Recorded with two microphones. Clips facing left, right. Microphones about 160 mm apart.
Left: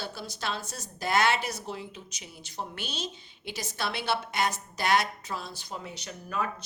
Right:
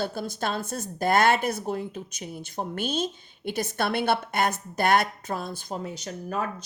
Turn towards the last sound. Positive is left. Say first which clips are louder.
# right 3 dB
turn(degrees=-45)  # may be behind; listen again after turning